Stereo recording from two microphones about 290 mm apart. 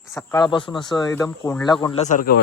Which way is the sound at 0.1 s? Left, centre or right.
Centre.